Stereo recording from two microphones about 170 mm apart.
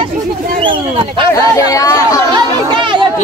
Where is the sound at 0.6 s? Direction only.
30° right (ahead or behind).